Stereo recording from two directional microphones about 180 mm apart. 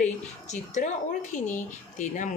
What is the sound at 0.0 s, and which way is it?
Speech, 40° left (ahead or behind).